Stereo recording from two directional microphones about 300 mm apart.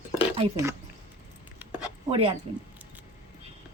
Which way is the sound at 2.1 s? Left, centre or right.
Centre.